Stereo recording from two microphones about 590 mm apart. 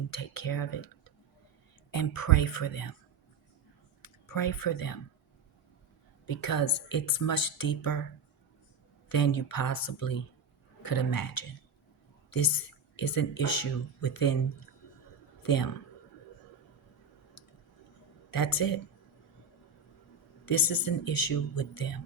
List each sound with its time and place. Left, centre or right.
0.1 s speech: left
1.9 s speech: left
4.0 s speech: left
6.2 s speech: left
9.0 s speech: left
15.4 s speech: left
18.3 s speech: left
20.4 s speech: left